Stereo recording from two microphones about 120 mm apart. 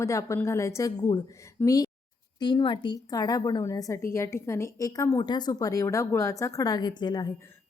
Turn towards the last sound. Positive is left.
turn(degrees=35)  # may be behind; listen again after turning